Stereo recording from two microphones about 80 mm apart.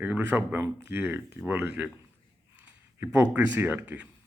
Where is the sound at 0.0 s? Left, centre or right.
Right.